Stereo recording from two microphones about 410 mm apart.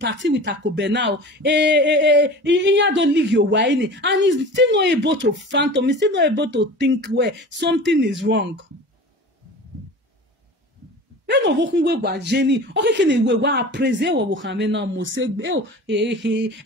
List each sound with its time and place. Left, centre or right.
0.0 s speech: right
11.2 s speech: right